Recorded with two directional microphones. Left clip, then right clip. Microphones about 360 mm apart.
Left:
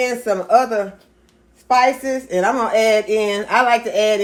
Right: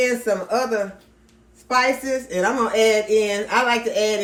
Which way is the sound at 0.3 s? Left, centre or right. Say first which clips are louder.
Left 6 dB; left.